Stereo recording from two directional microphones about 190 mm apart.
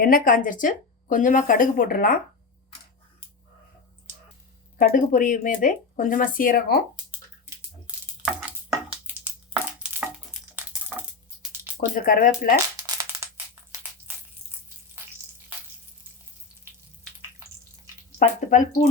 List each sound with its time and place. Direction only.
0.0 s speech: 45° left (ahead or behind)
4.8 s speech: 45° left (ahead or behind)
7.9 s a sound: 5° right (ahead or behind)
9.0 s crushing: 5° right (ahead or behind)
12.0 s speech: 45° left (ahead or behind)
12.7 s crushing: 15° right (ahead or behind)
18.2 s speech: 40° left (ahead or behind)